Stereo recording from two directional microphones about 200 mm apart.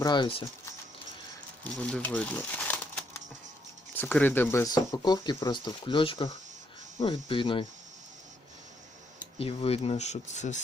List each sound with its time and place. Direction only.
0.0 s speech: 20° left (ahead or behind)
1.6 s speech: 5° left (ahead or behind); by 7.6 s 25° left (ahead or behind)
9.4 s speech: 30° left (ahead or behind)